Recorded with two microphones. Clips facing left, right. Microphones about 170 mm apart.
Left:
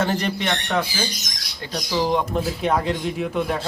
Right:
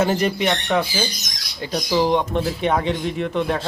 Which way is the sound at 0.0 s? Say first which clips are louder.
Right 4 dB; 5° right (ahead or behind).